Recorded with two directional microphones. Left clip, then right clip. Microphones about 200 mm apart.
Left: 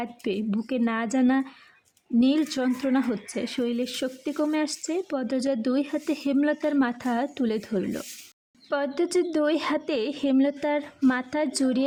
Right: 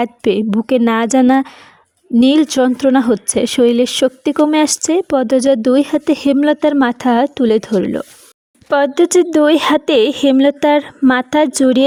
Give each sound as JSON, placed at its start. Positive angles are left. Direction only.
{"t": 0.0, "sound": "speech", "side_deg": -45}